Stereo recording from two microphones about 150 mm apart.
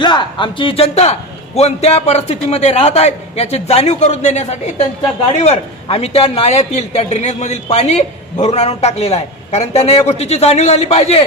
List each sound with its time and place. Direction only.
0.0 s a man's voice: 30° left (ahead or behind)